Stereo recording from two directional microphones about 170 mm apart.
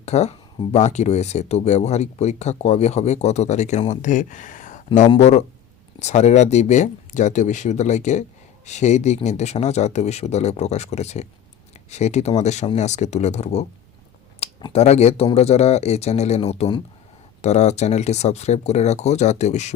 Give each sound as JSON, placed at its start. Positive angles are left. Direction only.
{"t": 0.0, "sound": "speech", "side_deg": 40}
{"t": 14.7, "sound": "speech", "side_deg": 40}